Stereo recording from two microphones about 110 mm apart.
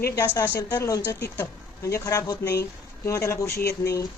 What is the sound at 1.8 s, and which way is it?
A woman's voice, 30° left (ahead or behind).